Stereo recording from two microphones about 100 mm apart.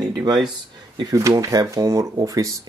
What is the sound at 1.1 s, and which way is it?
Speech, 35° right (ahead or behind).